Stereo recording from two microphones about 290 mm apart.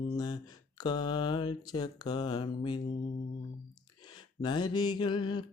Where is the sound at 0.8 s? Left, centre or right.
Centre.